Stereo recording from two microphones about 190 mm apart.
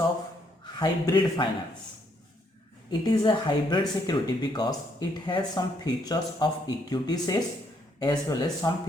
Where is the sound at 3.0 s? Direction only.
25° left (ahead or behind).